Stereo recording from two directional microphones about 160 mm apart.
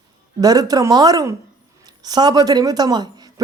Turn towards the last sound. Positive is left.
turn(degrees=-25)  # may be behind; listen again after turning